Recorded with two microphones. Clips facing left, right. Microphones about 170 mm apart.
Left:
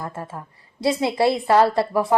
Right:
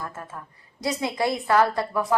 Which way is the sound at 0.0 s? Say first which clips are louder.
Left 4 dB; 25° left (ahead or behind).